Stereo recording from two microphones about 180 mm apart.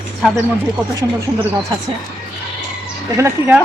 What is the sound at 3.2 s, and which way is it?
Speech, 15° right (ahead or behind).